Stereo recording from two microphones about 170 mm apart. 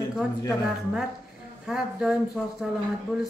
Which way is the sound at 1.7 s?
5° right (ahead or behind).